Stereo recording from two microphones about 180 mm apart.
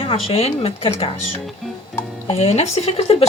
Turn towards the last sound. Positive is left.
turn(degrees=35)  # may be behind; listen again after turning